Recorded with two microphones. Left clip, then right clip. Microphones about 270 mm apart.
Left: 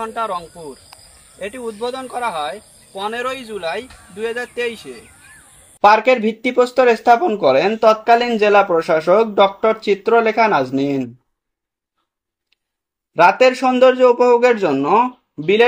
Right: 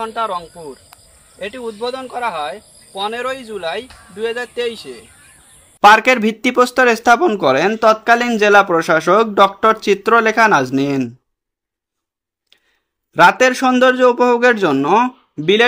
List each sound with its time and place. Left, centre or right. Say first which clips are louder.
0.0 s speech: right 2 dB; centre
4.9 s a sound: even; centre
5.9 s speech: right 3 dB; right
13.2 s speech: right 1 dB; right